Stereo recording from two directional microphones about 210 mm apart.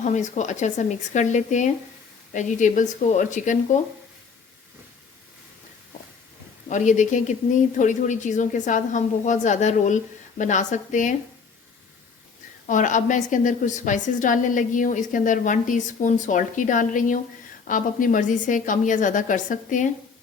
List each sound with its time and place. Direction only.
0.0 s a woman's voice: 35° left (ahead or behind)
6.7 s a woman's voice: 35° left (ahead or behind)
12.6 s a woman's voice: 35° left (ahead or behind)